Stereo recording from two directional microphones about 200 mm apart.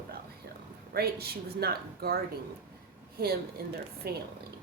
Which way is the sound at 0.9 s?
50° right (ahead or behind).